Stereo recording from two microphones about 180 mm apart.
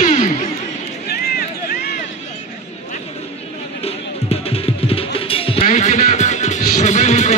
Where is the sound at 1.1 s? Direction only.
60° left (ahead or behind).